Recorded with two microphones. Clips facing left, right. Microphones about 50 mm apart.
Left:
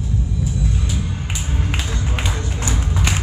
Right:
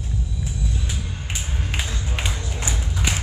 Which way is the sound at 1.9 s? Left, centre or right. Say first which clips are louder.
Left 4 dB; left.